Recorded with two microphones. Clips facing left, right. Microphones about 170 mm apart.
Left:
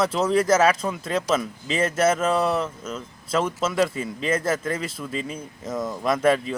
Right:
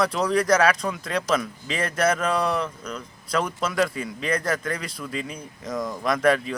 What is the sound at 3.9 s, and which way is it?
Speech, 25° left (ahead or behind).